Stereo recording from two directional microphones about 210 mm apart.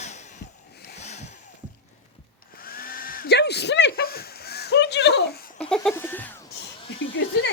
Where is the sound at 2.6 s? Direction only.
45° left (ahead or behind).